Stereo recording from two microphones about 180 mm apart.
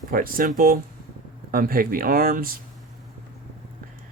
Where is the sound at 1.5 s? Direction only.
55° right (ahead or behind).